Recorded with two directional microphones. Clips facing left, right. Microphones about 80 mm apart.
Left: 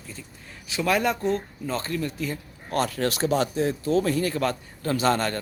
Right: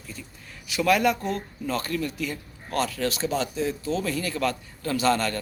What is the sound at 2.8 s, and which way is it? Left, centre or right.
Speech, left.